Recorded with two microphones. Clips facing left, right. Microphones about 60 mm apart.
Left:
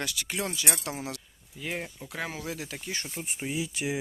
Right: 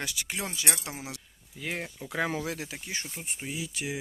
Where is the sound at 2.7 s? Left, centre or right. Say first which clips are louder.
Left 1 dB; centre.